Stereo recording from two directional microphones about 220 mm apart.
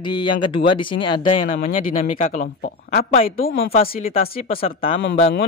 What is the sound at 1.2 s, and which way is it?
Speech, 35° left (ahead or behind).